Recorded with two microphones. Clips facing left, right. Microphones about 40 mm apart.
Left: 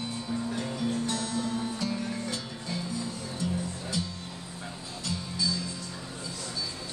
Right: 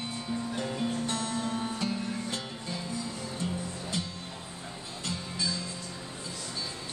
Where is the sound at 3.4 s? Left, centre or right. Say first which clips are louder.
Left 4 dB; right.